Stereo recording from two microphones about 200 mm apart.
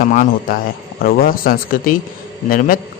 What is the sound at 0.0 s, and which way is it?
A man's voice, 45° left (ahead or behind).